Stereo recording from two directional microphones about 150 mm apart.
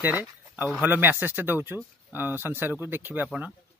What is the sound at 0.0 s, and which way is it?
Speech, 10° right (ahead or behind).